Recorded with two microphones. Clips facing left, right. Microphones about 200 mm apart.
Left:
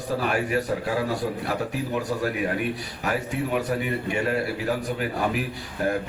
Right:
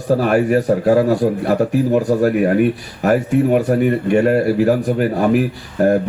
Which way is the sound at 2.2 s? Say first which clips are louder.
Right 12 dB; 50° right (ahead or behind).